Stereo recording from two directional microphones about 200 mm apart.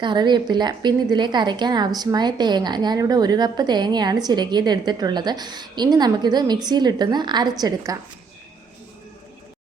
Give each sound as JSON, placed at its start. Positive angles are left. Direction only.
{"t": 0.0, "sound": "a woman's voice", "side_deg": -20}